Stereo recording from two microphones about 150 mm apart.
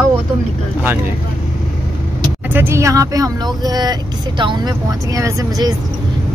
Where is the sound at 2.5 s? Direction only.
15° right (ahead or behind).